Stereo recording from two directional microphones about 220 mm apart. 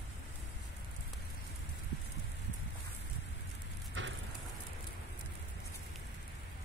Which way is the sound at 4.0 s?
55° right (ahead or behind).